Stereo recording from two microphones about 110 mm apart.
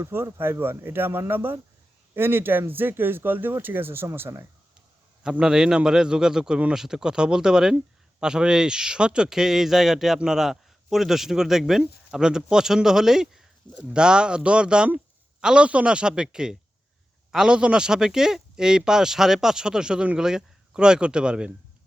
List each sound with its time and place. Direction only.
0.0 s speech: 20° right (ahead or behind)
5.2 s speech: 5° right (ahead or behind)